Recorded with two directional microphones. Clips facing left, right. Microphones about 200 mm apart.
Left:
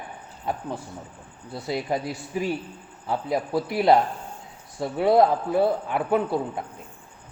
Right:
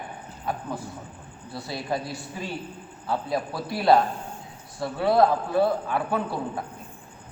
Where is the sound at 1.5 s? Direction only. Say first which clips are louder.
Left 3 dB; 20° left (ahead or behind).